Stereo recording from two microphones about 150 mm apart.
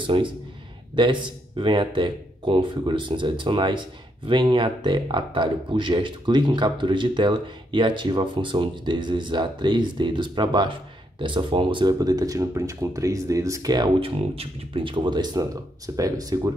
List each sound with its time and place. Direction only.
0.0 s speech: 35° right (ahead or behind)